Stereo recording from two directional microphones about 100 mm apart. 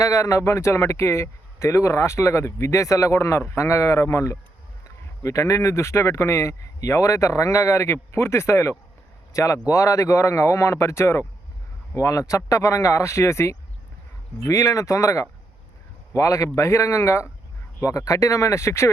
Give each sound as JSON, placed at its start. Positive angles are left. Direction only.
{"t": 0.0, "sound": "speech", "side_deg": 35}